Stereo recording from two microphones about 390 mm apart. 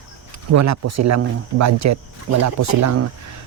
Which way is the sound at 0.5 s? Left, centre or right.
Right.